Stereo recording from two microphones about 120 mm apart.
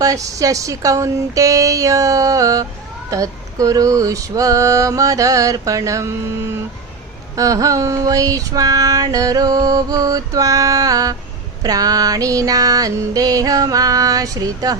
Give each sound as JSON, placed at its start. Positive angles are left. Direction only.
{"t": 0.0, "sound": "female singing", "side_deg": -30}
{"t": 11.6, "sound": "music", "side_deg": -30}